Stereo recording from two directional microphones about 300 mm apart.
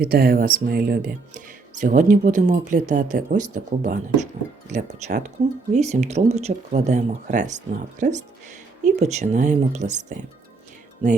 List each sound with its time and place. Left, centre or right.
0.0 s speech: right